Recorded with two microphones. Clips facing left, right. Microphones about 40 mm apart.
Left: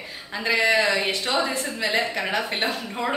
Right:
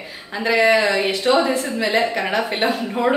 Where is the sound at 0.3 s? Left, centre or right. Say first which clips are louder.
Right 5 dB; centre.